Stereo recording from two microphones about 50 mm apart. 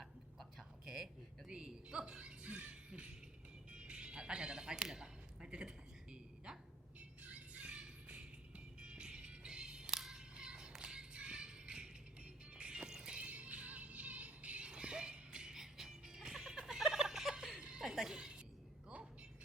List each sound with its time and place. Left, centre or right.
0.9 s a sound: centre
1.5 s music: centre
13.2 s music: right